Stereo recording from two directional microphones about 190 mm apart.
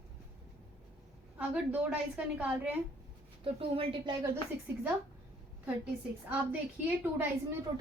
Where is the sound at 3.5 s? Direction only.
30° right (ahead or behind).